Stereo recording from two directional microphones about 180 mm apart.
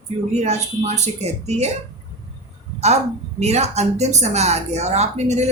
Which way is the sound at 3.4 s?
40° right (ahead or behind).